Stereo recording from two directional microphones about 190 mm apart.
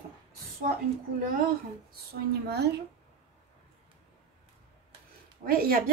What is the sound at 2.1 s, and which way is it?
Speech, 60° right (ahead or behind).